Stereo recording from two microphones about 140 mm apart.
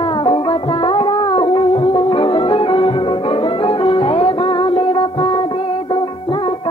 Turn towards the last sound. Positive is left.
turn(degrees=35)  # may be behind; listen again after turning